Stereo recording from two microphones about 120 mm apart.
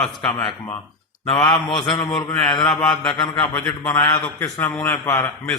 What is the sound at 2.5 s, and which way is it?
Mantra, 40° left (ahead or behind).